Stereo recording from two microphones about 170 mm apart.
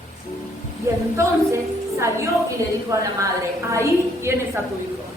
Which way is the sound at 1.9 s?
15° right (ahead or behind).